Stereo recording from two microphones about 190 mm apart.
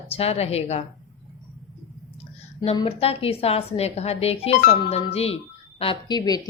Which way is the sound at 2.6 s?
25° left (ahead or behind).